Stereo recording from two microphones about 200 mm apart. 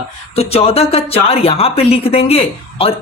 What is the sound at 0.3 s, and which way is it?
Speech, 30° left (ahead or behind).